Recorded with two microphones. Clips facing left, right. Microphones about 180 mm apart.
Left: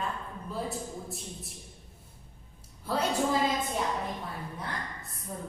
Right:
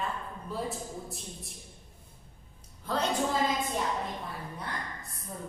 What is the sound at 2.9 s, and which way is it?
Speech, 10° left (ahead or behind).